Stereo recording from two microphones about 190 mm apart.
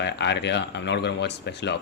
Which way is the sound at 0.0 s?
65° left (ahead or behind).